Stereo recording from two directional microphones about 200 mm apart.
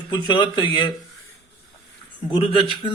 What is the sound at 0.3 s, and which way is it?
Speech, 25° left (ahead or behind).